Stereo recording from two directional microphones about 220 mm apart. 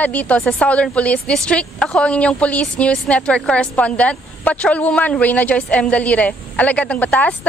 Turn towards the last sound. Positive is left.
turn(degrees=5)  # may be behind; listen again after turning